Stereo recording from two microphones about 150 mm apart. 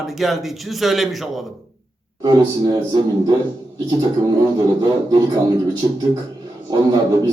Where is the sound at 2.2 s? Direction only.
25° right (ahead or behind).